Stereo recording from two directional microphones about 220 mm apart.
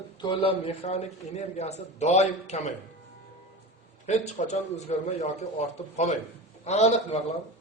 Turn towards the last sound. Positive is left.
turn(degrees=30)  # may be behind; listen again after turning